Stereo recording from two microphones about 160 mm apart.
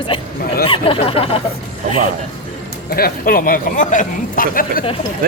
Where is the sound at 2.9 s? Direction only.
70° left (ahead or behind).